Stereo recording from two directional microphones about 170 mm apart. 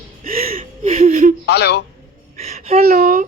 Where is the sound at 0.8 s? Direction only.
40° right (ahead or behind).